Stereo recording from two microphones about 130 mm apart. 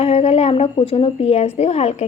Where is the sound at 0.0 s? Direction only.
50° left (ahead or behind).